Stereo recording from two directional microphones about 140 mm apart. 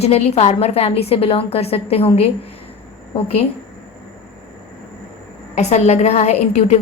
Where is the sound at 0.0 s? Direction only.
50° left (ahead or behind).